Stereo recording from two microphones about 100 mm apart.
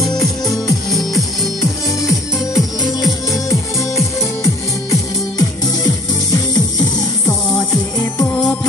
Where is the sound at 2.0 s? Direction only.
40° left (ahead or behind).